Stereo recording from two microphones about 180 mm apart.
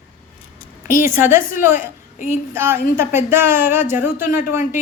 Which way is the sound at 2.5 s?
15° right (ahead or behind).